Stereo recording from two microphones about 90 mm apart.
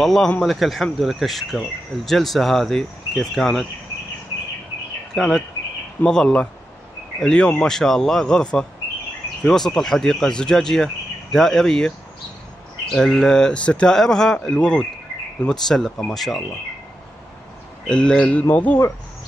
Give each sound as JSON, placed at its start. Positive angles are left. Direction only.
{"t": 0.0, "sound": "speech", "side_deg": 0}
{"t": 5.1, "sound": "speech", "side_deg": 5}
{"t": 12.9, "sound": "speech", "side_deg": 5}
{"t": 17.8, "sound": "speech", "side_deg": 10}